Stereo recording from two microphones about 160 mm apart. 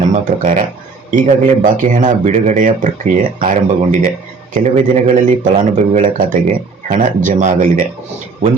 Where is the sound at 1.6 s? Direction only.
55° right (ahead or behind).